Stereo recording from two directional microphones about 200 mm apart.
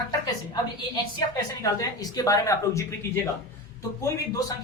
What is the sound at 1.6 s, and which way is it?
A woman's voice, 15° left (ahead or behind).